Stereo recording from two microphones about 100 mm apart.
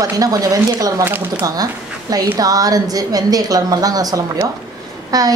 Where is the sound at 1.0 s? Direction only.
20° right (ahead or behind).